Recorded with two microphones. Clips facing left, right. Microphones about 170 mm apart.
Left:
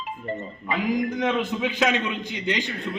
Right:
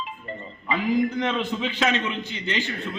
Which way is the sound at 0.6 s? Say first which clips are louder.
Right 2 dB; 15° left (ahead or behind).